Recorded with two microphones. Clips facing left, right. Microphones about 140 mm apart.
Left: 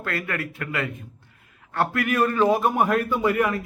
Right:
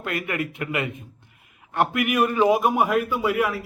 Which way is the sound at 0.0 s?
20° right (ahead or behind).